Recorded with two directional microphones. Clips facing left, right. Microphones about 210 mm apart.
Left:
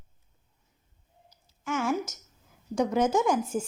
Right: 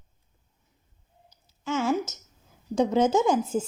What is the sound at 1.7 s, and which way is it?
Speech, 25° right (ahead or behind).